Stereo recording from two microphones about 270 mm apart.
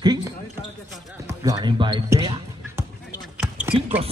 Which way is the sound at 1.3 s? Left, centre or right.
Centre.